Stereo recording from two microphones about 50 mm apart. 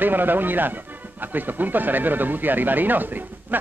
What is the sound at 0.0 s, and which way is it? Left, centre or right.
Speech, right.